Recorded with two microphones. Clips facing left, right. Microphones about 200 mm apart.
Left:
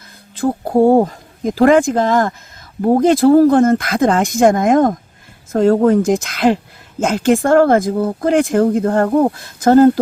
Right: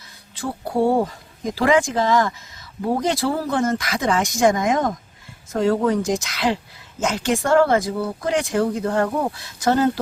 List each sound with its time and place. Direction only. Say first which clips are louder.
0.3 s speech: left 8 dB; 55° left (ahead or behind)